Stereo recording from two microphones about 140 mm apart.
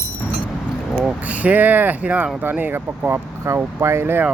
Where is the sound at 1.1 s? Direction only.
10° right (ahead or behind).